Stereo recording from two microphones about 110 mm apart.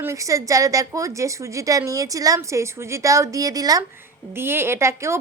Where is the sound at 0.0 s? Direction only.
30° right (ahead or behind).